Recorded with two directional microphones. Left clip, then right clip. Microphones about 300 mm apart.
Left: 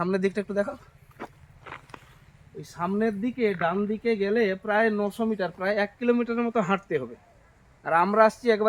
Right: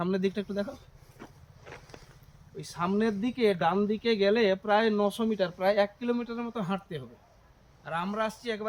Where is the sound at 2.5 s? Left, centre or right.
Centre.